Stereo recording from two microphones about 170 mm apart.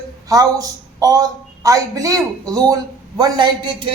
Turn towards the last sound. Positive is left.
turn(degrees=-25)  # may be behind; listen again after turning